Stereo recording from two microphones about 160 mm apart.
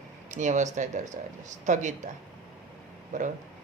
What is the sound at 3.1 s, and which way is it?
Speech, 50° right (ahead or behind).